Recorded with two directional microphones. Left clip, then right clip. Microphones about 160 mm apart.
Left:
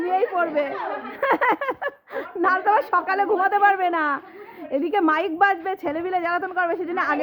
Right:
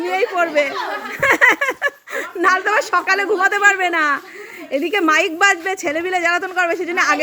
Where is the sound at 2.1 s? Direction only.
10° right (ahead or behind).